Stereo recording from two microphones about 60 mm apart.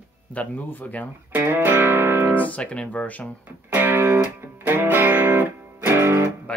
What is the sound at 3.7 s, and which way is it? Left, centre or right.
Music, right.